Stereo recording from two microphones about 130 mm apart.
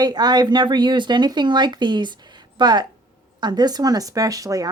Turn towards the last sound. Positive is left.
turn(degrees=-25)  # may be behind; listen again after turning